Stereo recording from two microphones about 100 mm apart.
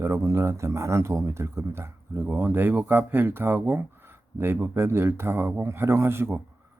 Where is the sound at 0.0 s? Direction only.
30° right (ahead or behind).